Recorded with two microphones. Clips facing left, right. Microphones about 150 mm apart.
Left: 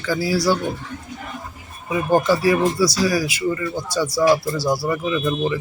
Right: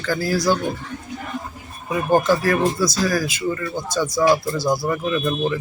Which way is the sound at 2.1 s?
10° left (ahead or behind).